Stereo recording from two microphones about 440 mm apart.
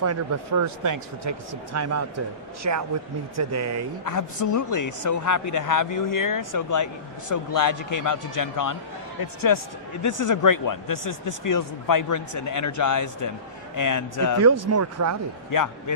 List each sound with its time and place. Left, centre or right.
0.0 s speech: right
4.0 s speech: left
14.4 s speech: right
15.4 s a man's voice: left